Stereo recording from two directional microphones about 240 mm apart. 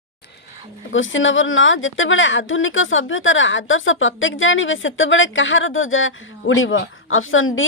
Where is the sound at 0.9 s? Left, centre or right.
Left.